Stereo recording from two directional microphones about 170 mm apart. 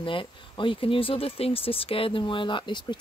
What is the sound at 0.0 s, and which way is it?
Speech, 30° left (ahead or behind).